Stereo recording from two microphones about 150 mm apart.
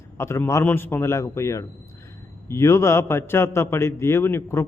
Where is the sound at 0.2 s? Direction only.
20° left (ahead or behind).